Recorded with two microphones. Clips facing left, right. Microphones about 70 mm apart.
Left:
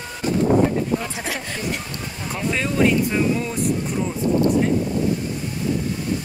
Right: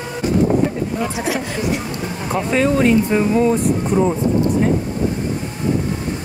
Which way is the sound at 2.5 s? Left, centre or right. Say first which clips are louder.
Right 5 dB; centre.